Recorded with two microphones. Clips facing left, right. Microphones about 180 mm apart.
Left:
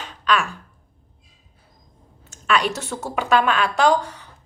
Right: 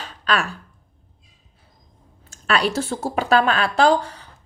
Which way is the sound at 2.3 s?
35° right (ahead or behind).